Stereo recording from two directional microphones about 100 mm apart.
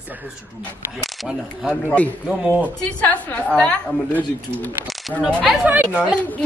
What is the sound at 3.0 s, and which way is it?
Speech, 15° left (ahead or behind).